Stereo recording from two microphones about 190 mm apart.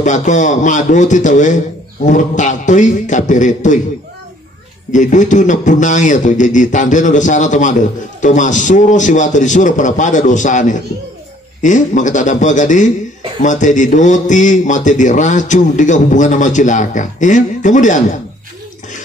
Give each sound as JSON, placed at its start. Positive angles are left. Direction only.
{"t": 0.0, "sound": "a man's voice", "side_deg": 40}
{"t": 4.9, "sound": "a man's voice", "side_deg": 40}